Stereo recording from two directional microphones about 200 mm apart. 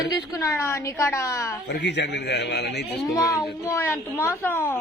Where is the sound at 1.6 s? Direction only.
60° left (ahead or behind).